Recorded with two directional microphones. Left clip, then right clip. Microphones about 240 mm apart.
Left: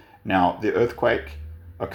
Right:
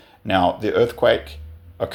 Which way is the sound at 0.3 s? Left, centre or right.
Right.